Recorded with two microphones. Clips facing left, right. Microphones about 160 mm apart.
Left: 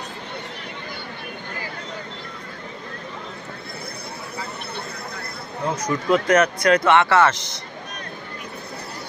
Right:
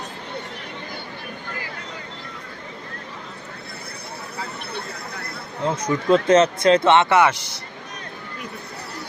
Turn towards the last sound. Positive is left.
turn(degrees=-10)  # may be behind; listen again after turning